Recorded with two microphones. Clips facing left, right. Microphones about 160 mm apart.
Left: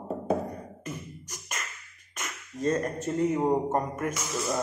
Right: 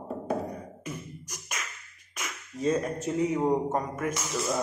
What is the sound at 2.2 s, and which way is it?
Speech, 5° right (ahead or behind).